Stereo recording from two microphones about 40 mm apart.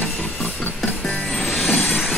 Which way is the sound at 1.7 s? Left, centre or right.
Left.